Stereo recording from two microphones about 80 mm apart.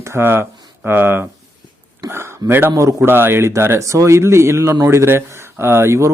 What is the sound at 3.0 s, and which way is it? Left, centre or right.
Speech, right.